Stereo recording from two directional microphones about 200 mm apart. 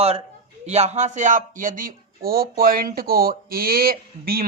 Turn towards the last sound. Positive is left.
turn(degrees=-45)  # may be behind; listen again after turning